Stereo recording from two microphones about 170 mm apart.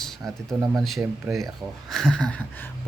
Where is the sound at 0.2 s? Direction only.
20° right (ahead or behind).